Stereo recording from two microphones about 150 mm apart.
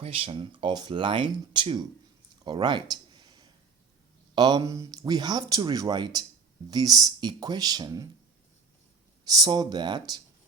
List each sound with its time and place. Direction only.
0.0 s speech: 40° right (ahead or behind)
2.9 s a sound: 30° right (ahead or behind)
4.4 s speech: 30° right (ahead or behind)
9.2 s speech: 25° right (ahead or behind)